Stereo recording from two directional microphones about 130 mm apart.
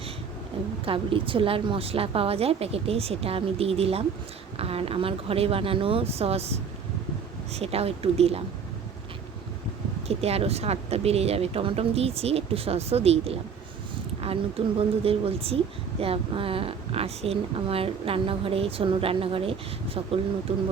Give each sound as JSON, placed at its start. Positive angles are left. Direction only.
{"t": 0.9, "sound": "speech", "side_deg": -45}
{"t": 10.1, "sound": "speech", "side_deg": -50}